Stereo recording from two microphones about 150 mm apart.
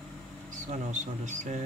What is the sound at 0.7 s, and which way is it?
Speech, 55° right (ahead or behind).